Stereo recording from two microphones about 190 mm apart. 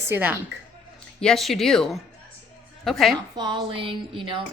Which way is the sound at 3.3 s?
25° right (ahead or behind).